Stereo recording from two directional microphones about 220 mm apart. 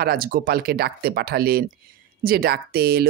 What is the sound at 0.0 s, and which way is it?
Speech, 40° right (ahead or behind).